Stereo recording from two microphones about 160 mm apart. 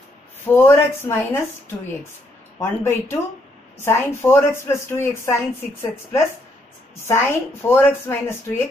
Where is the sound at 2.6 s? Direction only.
15° left (ahead or behind).